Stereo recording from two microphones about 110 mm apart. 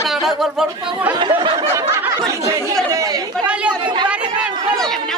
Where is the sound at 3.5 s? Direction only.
10° right (ahead or behind).